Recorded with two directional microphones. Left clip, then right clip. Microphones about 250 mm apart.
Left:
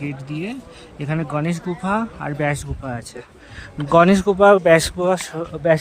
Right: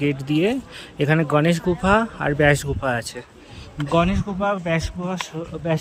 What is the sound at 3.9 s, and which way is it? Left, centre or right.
Speech, left.